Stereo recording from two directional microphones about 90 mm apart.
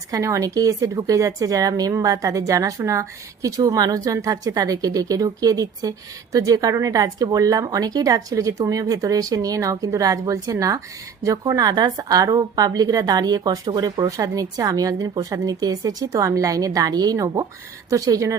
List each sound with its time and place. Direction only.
0.1 s speech: 35° right (ahead or behind)